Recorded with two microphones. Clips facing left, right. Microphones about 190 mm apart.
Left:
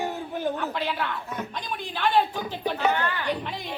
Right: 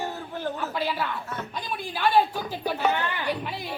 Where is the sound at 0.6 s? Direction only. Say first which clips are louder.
Even; 10° right (ahead or behind).